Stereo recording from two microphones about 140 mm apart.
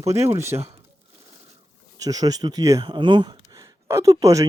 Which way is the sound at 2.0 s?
25° right (ahead or behind).